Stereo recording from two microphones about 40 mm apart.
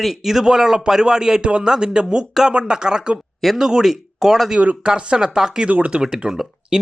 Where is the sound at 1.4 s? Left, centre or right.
Right; by 4.5 s centre.